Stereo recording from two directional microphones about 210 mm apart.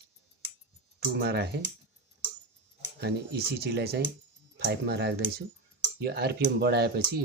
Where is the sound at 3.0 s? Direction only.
50° right (ahead or behind).